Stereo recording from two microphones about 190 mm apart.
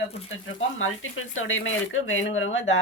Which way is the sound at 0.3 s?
90° left.